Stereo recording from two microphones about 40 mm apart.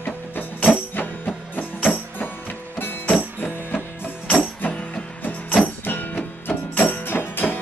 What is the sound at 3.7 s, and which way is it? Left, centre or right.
Music, left.